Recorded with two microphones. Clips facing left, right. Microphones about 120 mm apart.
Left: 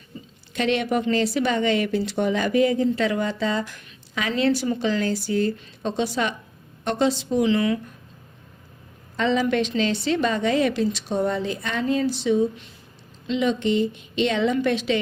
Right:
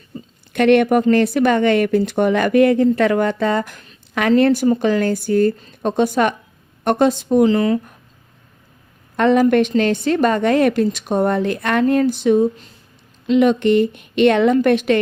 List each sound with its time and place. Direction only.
0.5 s speech: 55° right (ahead or behind)
4.1 s a woman's voice: 55° right (ahead or behind); by 7.8 s 40° right (ahead or behind)
9.1 s a woman's voice: 55° right (ahead or behind)